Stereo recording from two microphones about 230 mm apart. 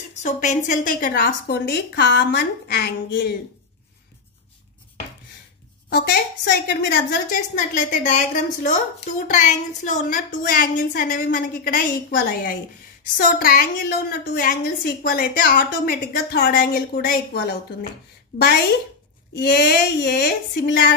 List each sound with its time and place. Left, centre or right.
0.1 s a woman's voice: left
5.9 s a woman's voice: left
19.3 s a woman's voice: left